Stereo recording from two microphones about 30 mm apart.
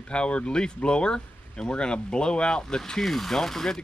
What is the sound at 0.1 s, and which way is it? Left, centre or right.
Speech, left.